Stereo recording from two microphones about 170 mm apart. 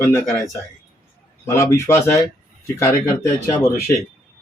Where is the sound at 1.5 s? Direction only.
20° left (ahead or behind).